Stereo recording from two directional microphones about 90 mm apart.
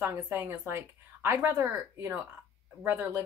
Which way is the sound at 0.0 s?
25° right (ahead or behind).